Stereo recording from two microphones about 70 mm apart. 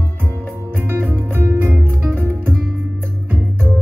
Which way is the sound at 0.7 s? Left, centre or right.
Right.